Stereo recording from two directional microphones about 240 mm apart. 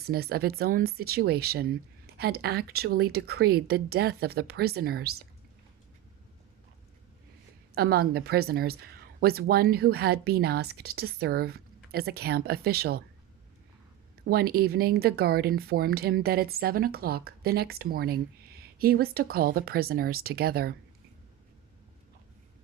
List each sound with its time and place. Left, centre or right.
0.0 s speech: right
7.8 s speech: right
14.3 s speech: right